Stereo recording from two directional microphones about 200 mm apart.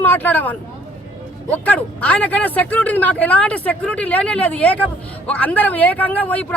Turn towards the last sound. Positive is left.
turn(degrees=5)  # may be behind; listen again after turning